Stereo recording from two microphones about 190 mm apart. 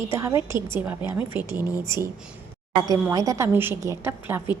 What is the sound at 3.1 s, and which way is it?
Speech, 15° right (ahead or behind).